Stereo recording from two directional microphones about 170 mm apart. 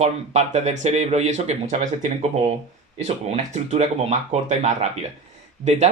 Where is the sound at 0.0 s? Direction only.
40° right (ahead or behind).